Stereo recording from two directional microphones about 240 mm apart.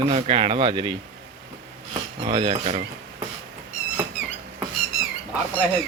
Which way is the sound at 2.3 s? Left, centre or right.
Right.